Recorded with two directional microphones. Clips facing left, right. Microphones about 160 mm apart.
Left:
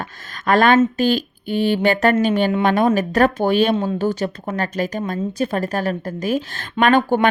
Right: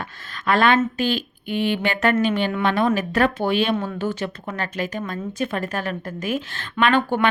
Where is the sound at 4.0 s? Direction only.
40° left (ahead or behind).